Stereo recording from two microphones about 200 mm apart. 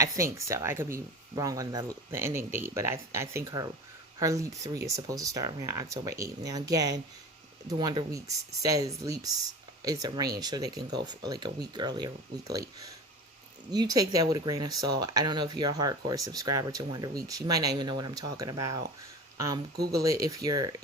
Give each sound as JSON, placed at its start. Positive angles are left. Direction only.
{"t": 0.0, "sound": "speech", "side_deg": -15}
{"t": 19.9, "sound": "speech", "side_deg": -15}